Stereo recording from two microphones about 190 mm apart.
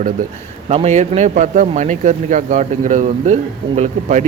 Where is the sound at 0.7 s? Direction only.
35° right (ahead or behind).